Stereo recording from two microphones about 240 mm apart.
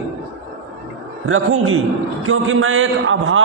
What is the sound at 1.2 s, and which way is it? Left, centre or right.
A man's voice, right.